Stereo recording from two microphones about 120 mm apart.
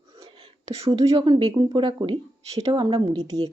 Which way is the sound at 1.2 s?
45° right (ahead or behind).